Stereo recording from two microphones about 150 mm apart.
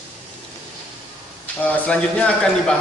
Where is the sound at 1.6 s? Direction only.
10° left (ahead or behind).